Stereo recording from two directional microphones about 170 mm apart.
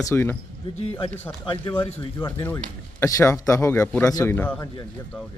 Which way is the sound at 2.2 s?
15° left (ahead or behind).